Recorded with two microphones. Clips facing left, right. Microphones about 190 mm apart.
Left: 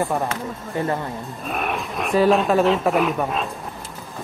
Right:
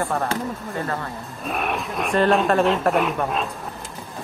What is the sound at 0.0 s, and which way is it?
Speech, 15° left (ahead or behind).